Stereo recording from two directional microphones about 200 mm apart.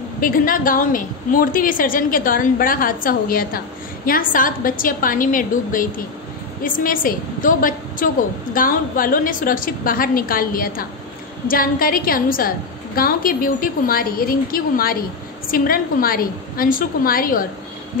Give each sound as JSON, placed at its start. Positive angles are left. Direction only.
{"t": 0.2, "sound": "a woman's voice", "side_deg": 45}